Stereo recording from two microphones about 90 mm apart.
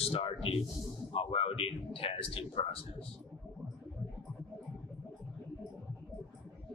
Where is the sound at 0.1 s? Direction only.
90° left.